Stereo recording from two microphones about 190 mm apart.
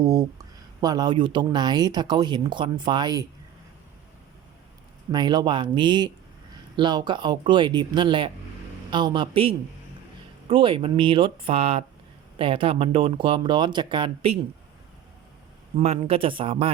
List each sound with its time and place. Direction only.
0.0 s speech: 20° right (ahead or behind)
5.1 s speech: 20° right (ahead or behind)
15.8 s speech: 30° right (ahead or behind)